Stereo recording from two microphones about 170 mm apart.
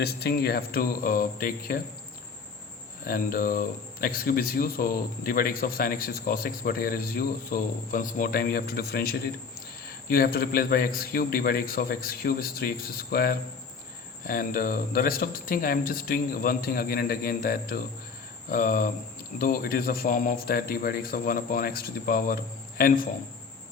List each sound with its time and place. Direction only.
0.0 s speech: 70° left (ahead or behind)
3.0 s speech: 55° left (ahead or behind)
18.4 s cricket: 50° left (ahead or behind)
19.4 s speech: 60° left (ahead or behind)